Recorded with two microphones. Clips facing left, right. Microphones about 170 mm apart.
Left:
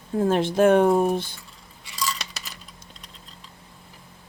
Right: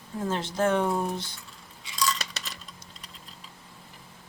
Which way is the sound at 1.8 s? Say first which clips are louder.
Right 1 dB; 5° left (ahead or behind).